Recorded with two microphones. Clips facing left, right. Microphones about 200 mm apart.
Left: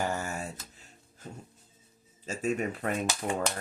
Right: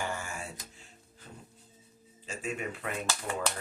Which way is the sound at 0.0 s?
40° left (ahead or behind).